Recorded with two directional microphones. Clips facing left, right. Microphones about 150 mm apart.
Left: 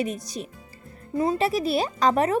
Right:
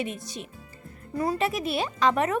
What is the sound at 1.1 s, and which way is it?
Speech, 25° left (ahead or behind).